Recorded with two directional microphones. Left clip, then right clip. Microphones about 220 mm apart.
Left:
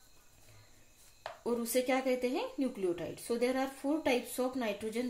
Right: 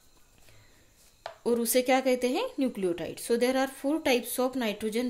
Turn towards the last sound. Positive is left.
turn(degrees=-50)  # may be behind; listen again after turning